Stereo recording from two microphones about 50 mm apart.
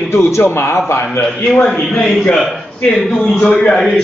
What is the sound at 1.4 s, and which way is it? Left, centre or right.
Speech, left.